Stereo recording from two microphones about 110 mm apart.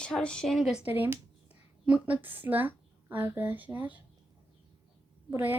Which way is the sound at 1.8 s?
10° right (ahead or behind).